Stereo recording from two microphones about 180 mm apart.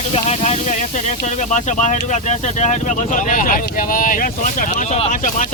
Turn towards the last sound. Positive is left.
turn(degrees=45)  # may be behind; listen again after turning